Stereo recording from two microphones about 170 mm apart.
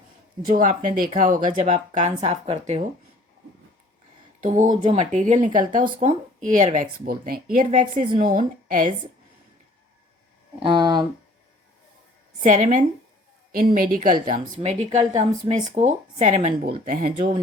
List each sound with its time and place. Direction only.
0.4 s speech: 50° right (ahead or behind)
4.4 s speech: 45° right (ahead or behind)
10.6 s speech: 25° right (ahead or behind)
12.4 s speech: 50° right (ahead or behind)